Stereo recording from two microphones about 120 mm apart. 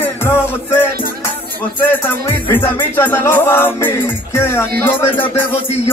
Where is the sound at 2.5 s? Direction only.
15° left (ahead or behind).